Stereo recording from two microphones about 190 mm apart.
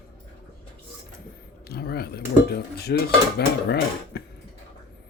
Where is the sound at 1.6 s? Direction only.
55° left (ahead or behind).